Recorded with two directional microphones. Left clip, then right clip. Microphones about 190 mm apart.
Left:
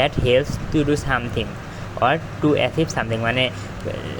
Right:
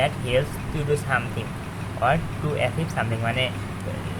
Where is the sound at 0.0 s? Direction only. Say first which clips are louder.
Left 5 dB; 45° left (ahead or behind).